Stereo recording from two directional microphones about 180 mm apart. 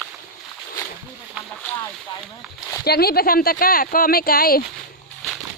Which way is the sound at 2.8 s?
60° left (ahead or behind).